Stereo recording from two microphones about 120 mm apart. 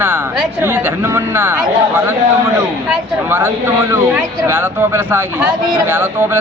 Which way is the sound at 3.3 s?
20° right (ahead or behind).